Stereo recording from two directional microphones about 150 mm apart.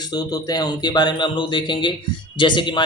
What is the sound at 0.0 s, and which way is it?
Speech, 25° left (ahead or behind).